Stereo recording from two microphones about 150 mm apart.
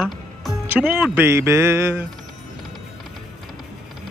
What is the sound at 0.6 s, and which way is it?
Music, 10° right (ahead or behind).